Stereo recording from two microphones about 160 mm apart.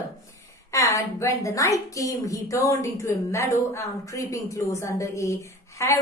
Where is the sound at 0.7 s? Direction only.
20° left (ahead or behind).